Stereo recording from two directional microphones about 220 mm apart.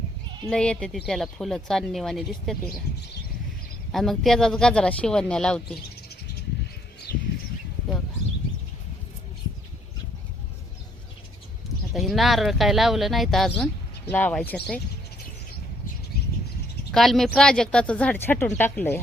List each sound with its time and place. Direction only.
0.5 s a woman's voice: 5° left (ahead or behind)
3.9 s a woman's voice: centre (ahead or behind)
7.1 s a sound: 45° left (ahead or behind)
11.9 s a woman's voice: centre (ahead or behind)
16.9 s a woman's voice: centre (ahead or behind)